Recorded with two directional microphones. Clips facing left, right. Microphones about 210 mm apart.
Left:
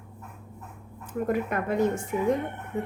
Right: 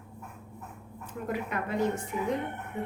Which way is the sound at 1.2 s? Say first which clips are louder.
Left 6 dB; 50° left (ahead or behind).